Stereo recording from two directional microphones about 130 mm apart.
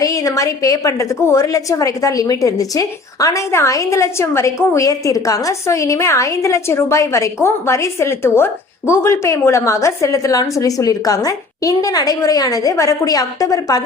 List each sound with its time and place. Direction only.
0.0 s a woman's voice: 25° left (ahead or behind)